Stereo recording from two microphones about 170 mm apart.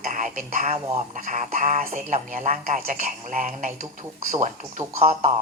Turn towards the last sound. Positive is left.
turn(degrees=-40)  # may be behind; listen again after turning